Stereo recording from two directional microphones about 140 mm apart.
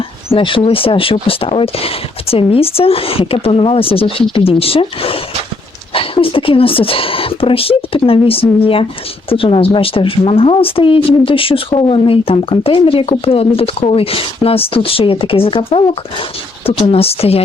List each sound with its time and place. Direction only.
0.3 s speech: 40° left (ahead or behind)
16.9 s speech: 45° left (ahead or behind)